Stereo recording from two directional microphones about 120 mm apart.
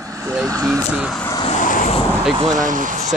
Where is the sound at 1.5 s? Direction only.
90° left.